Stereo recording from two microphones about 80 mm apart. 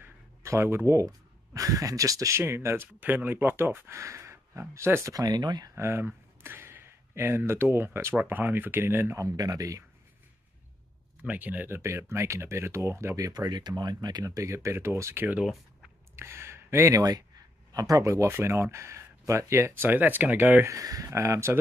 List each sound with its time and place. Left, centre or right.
0.0 s speech: right
3.0 s speech: right
5.1 s speech: right
5.8 s speech: right
9.4 s speech: right
11.2 s speech: right
13.5 s speech: right
18.3 s speech: right
20.6 s speech: right